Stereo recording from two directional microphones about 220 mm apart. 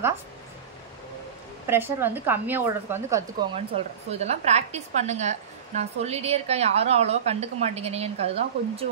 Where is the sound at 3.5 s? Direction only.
30° right (ahead or behind).